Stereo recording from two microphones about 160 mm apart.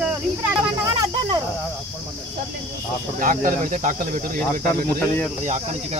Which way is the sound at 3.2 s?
55° right (ahead or behind).